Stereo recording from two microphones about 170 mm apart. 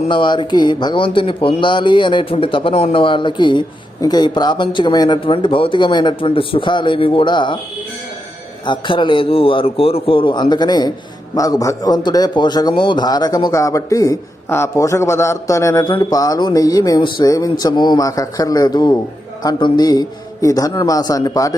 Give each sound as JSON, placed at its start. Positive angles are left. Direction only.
{"t": 0.1, "sound": "a man's voice", "side_deg": 30}
{"t": 8.6, "sound": "a man's voice", "side_deg": 30}